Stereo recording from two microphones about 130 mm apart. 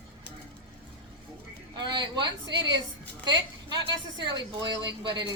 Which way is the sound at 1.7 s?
35° right (ahead or behind).